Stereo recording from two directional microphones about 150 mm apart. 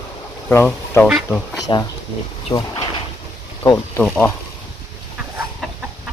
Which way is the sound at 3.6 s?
30° left (ahead or behind).